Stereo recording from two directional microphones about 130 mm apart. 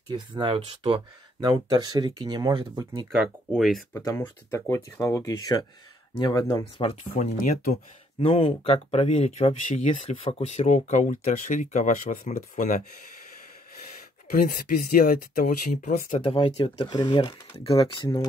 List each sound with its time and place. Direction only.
0.6 s speech: 50° right (ahead or behind)
1.4 s speech: 30° right (ahead or behind)
3.2 s speech: centre (ahead or behind)
3.9 s speech: 25° left (ahead or behind)
7.0 s speech: 65° left (ahead or behind)
8.3 s speech: 45° left (ahead or behind); by 12.8 s 85° left
14.3 s speech: 90° left
16.3 s speech: 45° left (ahead or behind)